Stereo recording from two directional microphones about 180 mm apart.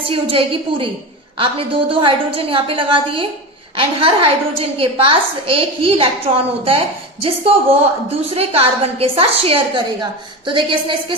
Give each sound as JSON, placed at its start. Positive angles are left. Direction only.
{"t": 0.0, "sound": "a woman's voice", "side_deg": -30}